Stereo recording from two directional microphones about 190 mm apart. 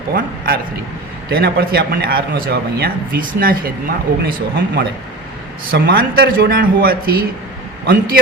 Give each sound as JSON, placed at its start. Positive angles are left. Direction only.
{"t": 0.1, "sound": "a man's voice", "side_deg": -50}